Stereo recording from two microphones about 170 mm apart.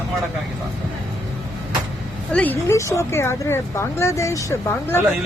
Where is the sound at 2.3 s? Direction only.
10° left (ahead or behind).